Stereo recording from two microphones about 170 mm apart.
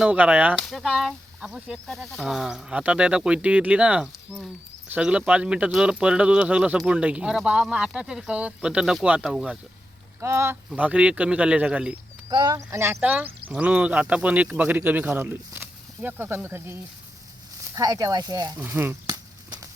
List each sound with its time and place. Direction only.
0.0 s speech: 5° right (ahead or behind)
10.2 s speech: 15° right (ahead or behind)
12.3 s speech: 25° right (ahead or behind)
17.7 s speech: 20° right (ahead or behind)
18.6 s speech: 10° right (ahead or behind)
19.1 s a sound: 25° right (ahead or behind)